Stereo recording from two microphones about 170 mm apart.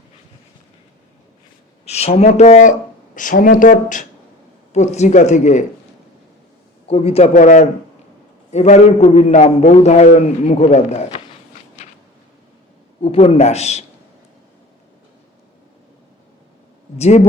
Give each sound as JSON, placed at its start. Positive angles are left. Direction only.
{"t": 1.8, "sound": "a man's voice", "side_deg": 40}
{"t": 6.8, "sound": "a man's voice", "side_deg": 35}
{"t": 11.8, "sound": "a sound", "side_deg": 45}
{"t": 13.0, "sound": "a man's voice", "side_deg": 35}
{"t": 17.0, "sound": "a man's voice", "side_deg": 40}